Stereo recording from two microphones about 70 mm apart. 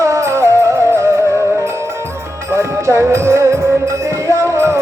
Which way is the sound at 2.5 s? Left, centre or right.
Right.